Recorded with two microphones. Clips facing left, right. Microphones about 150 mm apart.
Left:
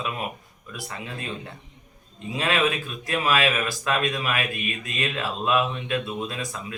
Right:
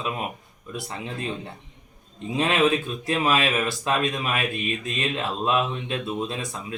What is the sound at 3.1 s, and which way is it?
Speech, 25° right (ahead or behind).